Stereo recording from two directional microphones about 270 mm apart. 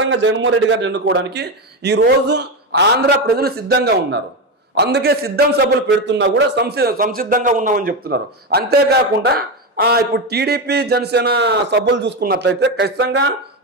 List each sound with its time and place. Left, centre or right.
0.0 s a man's voice: right